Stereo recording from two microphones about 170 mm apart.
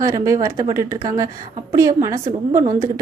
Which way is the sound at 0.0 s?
20° right (ahead or behind).